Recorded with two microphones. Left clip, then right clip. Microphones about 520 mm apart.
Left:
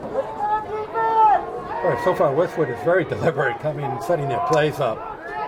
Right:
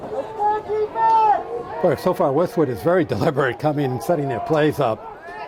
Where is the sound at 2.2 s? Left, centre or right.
Right.